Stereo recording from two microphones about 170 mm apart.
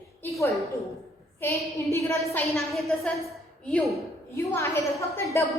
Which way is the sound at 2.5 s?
Centre (ahead or behind).